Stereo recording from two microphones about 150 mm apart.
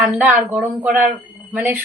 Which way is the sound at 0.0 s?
5° right (ahead or behind).